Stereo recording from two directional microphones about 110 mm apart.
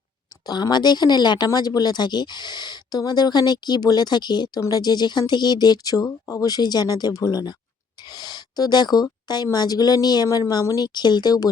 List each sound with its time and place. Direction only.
0.4 s speech: 40° left (ahead or behind)